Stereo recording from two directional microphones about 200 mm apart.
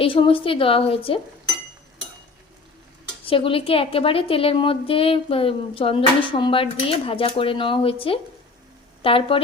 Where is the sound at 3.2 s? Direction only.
25° left (ahead or behind).